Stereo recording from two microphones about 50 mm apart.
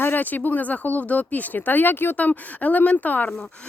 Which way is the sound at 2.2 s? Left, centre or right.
Left.